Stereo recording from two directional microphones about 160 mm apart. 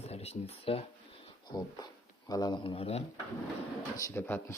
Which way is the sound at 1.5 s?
25° left (ahead or behind).